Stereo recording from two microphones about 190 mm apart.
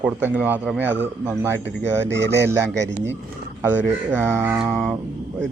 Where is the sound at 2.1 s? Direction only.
65° right (ahead or behind).